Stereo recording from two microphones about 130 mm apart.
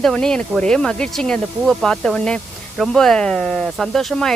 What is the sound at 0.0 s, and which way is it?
Speech, 5° left (ahead or behind).